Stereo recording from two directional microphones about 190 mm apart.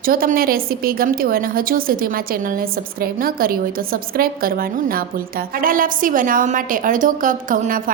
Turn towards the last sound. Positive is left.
turn(degrees=-45)  # may be behind; listen again after turning